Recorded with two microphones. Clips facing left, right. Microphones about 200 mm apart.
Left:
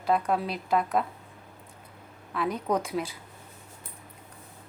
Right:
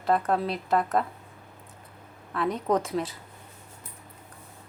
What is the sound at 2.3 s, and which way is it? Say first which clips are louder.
Speech: right 2 dB; centre (ahead or behind).